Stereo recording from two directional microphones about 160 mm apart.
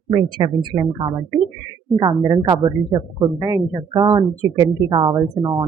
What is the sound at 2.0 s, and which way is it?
Speech, 25° right (ahead or behind).